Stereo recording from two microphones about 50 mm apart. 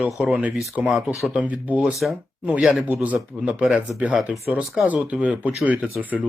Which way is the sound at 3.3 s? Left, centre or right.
Centre.